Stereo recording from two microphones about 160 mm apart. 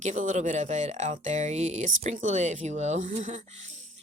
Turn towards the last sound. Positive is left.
turn(degrees=-50)  # may be behind; listen again after turning